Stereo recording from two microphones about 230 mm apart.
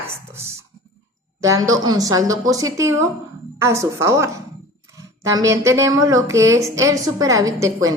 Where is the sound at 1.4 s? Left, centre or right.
Centre.